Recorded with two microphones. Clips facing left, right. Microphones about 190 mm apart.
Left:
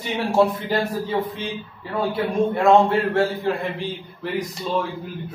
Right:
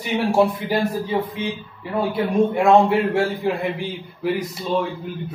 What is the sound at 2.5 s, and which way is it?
A man's voice, 15° right (ahead or behind).